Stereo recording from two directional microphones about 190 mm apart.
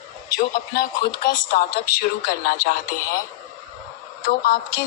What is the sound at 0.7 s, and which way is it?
Speech, 55° left (ahead or behind).